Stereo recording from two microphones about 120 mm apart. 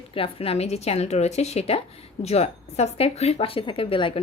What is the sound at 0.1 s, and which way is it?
Speech, 50° left (ahead or behind).